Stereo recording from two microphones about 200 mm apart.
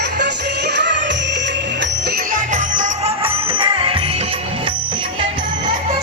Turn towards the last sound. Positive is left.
turn(degrees=-30)  # may be behind; listen again after turning